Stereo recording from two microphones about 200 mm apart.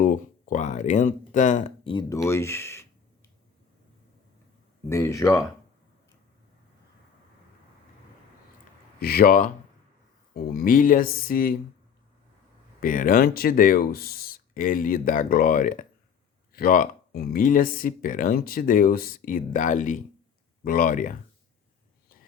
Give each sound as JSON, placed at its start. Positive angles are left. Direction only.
{"t": 0.0, "sound": "speech", "side_deg": 40}
{"t": 1.9, "sound": "speech", "side_deg": 20}
{"t": 4.9, "sound": "speech", "side_deg": 15}
{"t": 9.0, "sound": "speech", "side_deg": 50}
{"t": 12.8, "sound": "speech", "side_deg": 40}